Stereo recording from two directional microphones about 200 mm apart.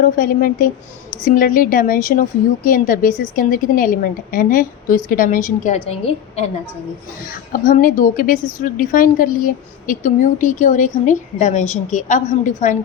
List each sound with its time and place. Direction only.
0.0 s a woman's voice: 45° left (ahead or behind)
7.5 s a woman's voice: 45° left (ahead or behind)